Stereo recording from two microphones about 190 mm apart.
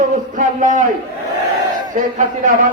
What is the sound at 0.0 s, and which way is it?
Speech, 40° right (ahead or behind).